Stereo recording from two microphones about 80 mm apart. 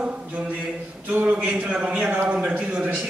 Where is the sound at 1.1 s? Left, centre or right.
Centre.